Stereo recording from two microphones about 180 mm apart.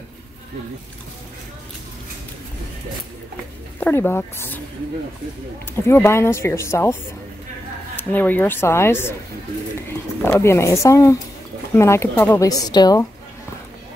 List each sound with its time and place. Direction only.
3.8 s a woman's voice: 10° left (ahead or behind)
5.9 s a woman's voice: 15° left (ahead or behind)
10.2 s a woman's voice: 15° left (ahead or behind)